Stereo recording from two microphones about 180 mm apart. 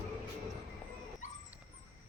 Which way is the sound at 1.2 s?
45° left (ahead or behind).